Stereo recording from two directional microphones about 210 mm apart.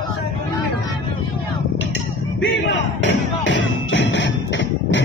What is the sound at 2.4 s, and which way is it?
Music, 60° left (ahead or behind).